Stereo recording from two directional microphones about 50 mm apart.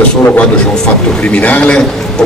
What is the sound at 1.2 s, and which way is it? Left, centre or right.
Speech, left.